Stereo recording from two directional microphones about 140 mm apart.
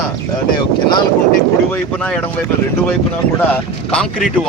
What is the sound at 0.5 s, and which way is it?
Speech, 35° left (ahead or behind).